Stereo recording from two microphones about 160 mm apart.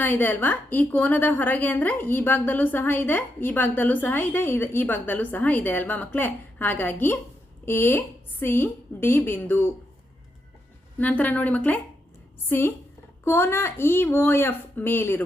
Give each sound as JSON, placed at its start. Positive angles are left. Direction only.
{"t": 0.0, "sound": "a woman's voice", "side_deg": 10}
{"t": 10.9, "sound": "a woman's voice", "side_deg": 10}